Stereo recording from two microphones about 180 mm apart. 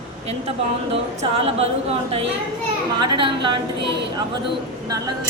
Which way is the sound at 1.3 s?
35° right (ahead or behind).